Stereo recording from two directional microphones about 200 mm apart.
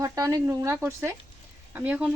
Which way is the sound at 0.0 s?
15° right (ahead or behind).